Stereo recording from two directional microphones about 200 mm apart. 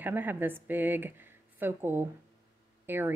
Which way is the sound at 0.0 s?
10° right (ahead or behind).